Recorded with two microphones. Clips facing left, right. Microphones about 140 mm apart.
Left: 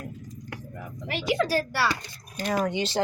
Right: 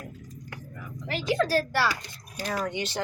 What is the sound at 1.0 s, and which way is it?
Speech, 10° left (ahead or behind).